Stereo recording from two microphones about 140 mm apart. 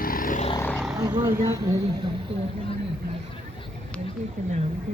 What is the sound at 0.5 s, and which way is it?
Vehicle, 15° left (ahead or behind).